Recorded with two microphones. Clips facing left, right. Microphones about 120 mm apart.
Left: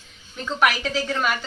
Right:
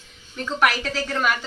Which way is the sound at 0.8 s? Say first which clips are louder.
Left 1 dB; 5° left (ahead or behind).